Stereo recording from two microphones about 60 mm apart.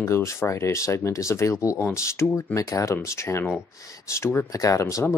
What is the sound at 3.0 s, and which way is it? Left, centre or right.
Speech, left.